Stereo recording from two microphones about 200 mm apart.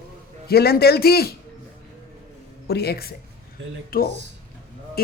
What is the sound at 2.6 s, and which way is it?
Speech, 55° left (ahead or behind).